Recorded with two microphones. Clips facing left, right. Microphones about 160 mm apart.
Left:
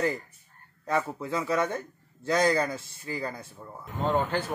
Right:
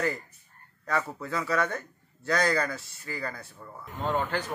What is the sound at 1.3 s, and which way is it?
Speech, 15° left (ahead or behind).